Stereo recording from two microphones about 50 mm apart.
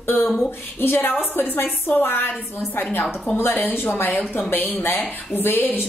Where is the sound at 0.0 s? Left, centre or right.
Left.